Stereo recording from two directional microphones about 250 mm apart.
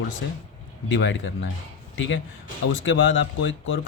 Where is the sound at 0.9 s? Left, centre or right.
Left.